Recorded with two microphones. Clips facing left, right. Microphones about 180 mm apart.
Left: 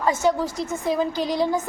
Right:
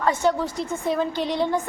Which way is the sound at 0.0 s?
5° left (ahead or behind).